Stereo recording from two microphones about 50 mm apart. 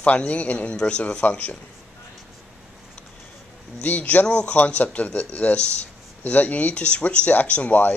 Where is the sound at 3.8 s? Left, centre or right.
Left.